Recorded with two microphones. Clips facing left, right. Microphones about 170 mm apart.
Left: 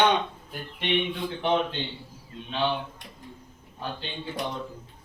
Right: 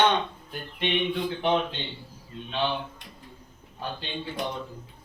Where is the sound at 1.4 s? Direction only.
Centre (ahead or behind).